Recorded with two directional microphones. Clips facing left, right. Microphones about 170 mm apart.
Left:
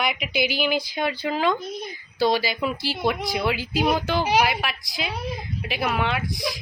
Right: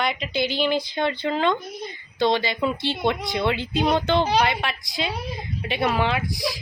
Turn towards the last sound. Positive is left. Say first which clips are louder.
# right 2 dB
turn(degrees=0)  # may be behind; listen again after turning